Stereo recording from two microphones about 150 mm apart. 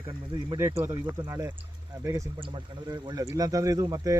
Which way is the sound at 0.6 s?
20° right (ahead or behind).